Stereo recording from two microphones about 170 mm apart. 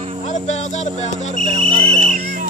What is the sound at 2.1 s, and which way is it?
Music, 50° right (ahead or behind).